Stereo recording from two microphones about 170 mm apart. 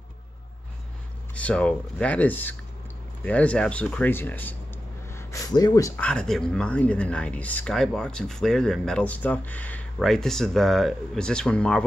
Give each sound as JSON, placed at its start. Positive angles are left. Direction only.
{"t": 1.3, "sound": "speech", "side_deg": 5}
{"t": 5.9, "sound": "speech", "side_deg": 5}